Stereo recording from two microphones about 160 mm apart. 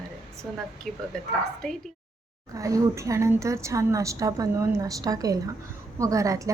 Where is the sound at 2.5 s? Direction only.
20° right (ahead or behind).